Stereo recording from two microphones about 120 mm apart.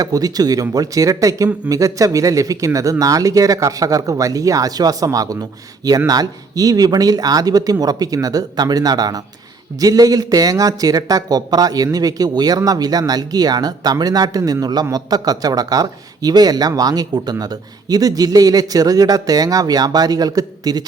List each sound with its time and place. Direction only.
0.0 s a man's voice: 30° right (ahead or behind)